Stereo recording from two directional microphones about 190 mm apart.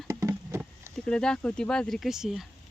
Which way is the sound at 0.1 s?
15° right (ahead or behind).